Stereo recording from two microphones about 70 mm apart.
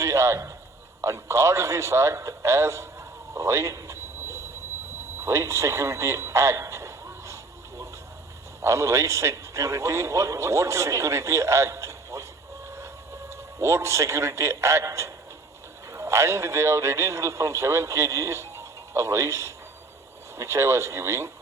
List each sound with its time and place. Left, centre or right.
0.0 s a sound: right
1.0 s a man's voice: right
8.6 s a man's voice: right
12.6 s train: right
13.3 s a man's voice: right